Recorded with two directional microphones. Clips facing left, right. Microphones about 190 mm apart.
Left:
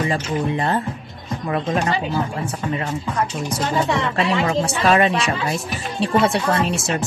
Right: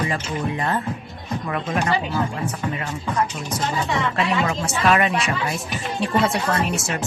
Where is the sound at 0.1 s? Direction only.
30° left (ahead or behind).